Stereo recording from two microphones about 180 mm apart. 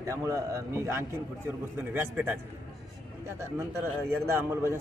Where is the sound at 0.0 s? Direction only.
15° right (ahead or behind).